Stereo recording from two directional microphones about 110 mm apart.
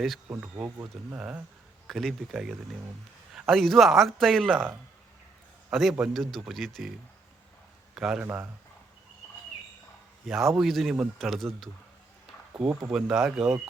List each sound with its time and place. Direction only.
0.4 s speech: 25° right (ahead or behind)
1.1 s speech: 10° right (ahead or behind)
1.9 s speech: centre (ahead or behind)
5.7 s speech: 5° right (ahead or behind)
7.9 s speech: 5° right (ahead or behind)
8.2 s speech: 20° right (ahead or behind)
10.2 s speech: centre (ahead or behind)
12.9 s speech: 5° right (ahead or behind)